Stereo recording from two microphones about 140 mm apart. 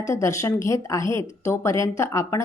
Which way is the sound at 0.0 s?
20° left (ahead or behind).